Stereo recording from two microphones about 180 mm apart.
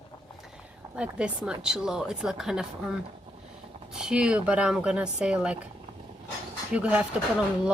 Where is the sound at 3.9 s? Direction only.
5° right (ahead or behind).